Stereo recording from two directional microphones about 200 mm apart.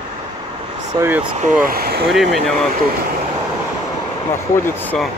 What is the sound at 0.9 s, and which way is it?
Speech, 20° right (ahead or behind).